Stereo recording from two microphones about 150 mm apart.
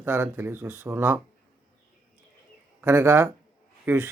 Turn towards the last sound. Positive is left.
turn(degrees=-15)  # may be behind; listen again after turning